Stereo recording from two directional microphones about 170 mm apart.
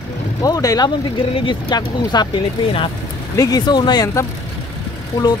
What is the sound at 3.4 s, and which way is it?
Speech, 25° left (ahead or behind).